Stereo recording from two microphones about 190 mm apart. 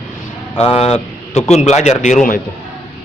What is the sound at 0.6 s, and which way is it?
A man's voice, 30° left (ahead or behind).